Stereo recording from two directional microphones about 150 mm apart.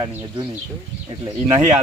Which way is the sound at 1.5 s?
20° right (ahead or behind).